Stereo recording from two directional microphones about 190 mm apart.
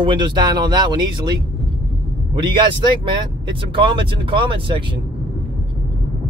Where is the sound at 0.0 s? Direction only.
25° right (ahead or behind).